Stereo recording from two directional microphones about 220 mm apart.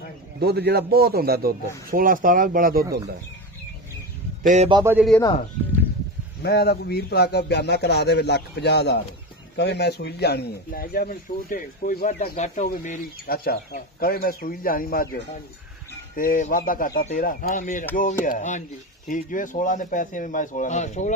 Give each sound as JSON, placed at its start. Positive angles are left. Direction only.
{"t": 0.4, "sound": "a man's voice", "side_deg": -45}
{"t": 4.4, "sound": "speech", "side_deg": -35}
{"t": 4.6, "sound": "speech", "side_deg": -20}
{"t": 4.9, "sound": "speech", "side_deg": 0}
{"t": 6.4, "sound": "a man's voice", "side_deg": 45}